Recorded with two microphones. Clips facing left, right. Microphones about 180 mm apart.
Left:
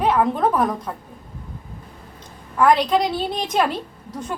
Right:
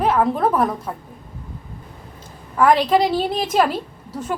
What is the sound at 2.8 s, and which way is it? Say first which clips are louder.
Speech: right 3 dB; 5° right (ahead or behind).